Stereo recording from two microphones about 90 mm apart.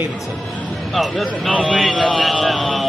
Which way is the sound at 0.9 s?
Centre (ahead or behind).